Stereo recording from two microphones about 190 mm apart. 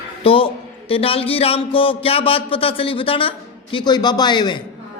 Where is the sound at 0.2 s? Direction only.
30° left (ahead or behind).